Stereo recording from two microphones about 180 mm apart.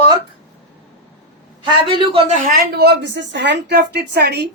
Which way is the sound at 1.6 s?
25° right (ahead or behind).